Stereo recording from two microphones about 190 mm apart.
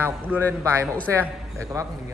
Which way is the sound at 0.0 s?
10° right (ahead or behind).